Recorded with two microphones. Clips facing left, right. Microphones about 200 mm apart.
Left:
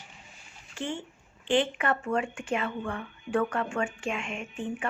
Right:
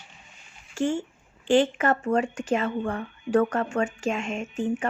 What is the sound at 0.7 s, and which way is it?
A woman's voice, 45° right (ahead or behind).